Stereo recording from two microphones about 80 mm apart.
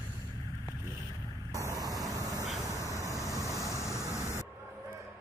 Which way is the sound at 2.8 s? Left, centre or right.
Left.